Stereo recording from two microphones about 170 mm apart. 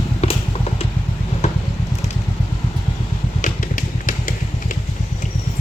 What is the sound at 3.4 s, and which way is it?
Vehicle, 50° left (ahead or behind).